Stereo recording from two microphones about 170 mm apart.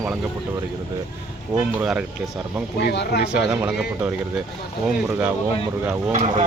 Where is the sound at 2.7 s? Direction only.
70° left (ahead or behind).